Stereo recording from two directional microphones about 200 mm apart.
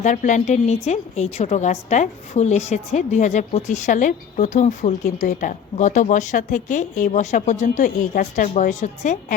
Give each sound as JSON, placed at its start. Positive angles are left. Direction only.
{"t": 0.0, "sound": "a woman's voice", "side_deg": 40}